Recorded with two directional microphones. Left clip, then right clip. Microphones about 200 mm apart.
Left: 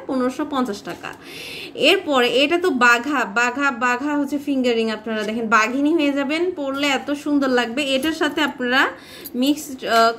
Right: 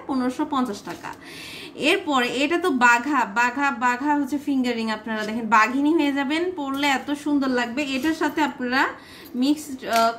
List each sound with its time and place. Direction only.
0.1 s a woman's voice: 10° left (ahead or behind)
1.8 s a woman's voice: 10° left (ahead or behind)